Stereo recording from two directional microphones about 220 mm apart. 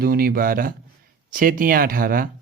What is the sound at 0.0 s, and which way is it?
Speech, 45° right (ahead or behind).